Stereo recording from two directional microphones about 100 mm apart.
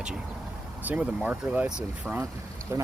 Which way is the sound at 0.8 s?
15° right (ahead or behind).